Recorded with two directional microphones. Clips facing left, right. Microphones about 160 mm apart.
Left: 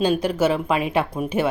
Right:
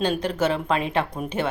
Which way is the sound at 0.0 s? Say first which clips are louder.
Left 3 dB; 10° left (ahead or behind).